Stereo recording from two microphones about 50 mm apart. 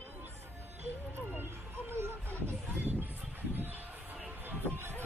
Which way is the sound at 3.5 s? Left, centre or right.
Right.